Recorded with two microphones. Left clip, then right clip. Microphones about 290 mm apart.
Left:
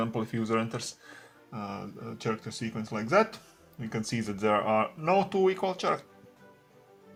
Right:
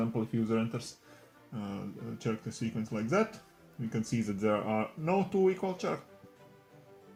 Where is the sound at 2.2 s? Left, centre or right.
Left.